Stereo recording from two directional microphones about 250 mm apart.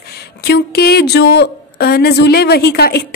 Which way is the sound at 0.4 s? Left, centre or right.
Left.